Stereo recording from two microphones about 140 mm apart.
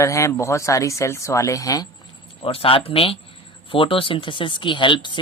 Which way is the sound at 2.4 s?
40° left (ahead or behind).